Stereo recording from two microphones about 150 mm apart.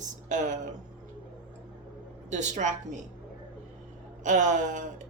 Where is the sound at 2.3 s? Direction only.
55° right (ahead or behind).